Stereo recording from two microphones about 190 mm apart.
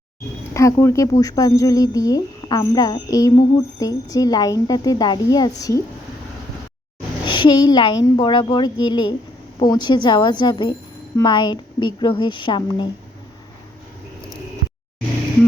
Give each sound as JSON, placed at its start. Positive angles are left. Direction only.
{"t": 0.5, "sound": "speech", "side_deg": 15}
{"t": 7.3, "sound": "speech", "side_deg": 25}